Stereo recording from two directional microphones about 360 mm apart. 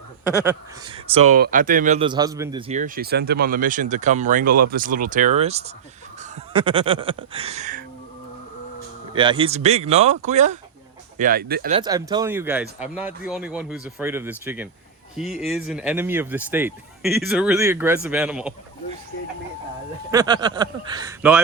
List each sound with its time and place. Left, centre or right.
0.9 s speech: centre
9.1 s speech: centre
11.8 s speech: centre
20.1 s speech: centre